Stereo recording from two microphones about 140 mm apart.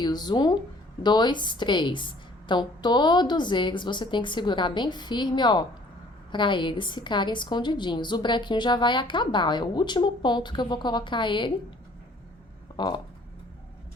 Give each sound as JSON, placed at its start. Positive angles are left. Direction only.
{"t": 0.0, "sound": "a woman's voice", "side_deg": 30}
{"t": 12.7, "sound": "speech", "side_deg": 35}